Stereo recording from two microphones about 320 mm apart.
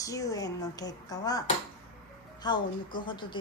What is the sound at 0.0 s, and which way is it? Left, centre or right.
A woman's voice, centre.